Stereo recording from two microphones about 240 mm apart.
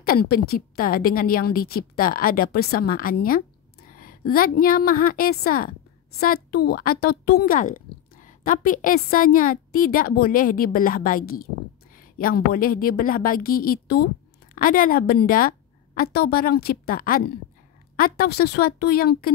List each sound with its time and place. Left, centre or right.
0.0 s a woman's voice: left